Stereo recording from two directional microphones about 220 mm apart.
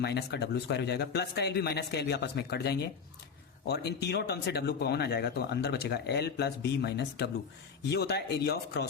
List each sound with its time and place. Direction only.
0.0 s speech: 50° left (ahead or behind)